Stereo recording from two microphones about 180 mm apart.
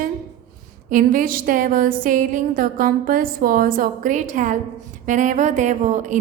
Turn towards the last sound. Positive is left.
turn(degrees=-40)  # may be behind; listen again after turning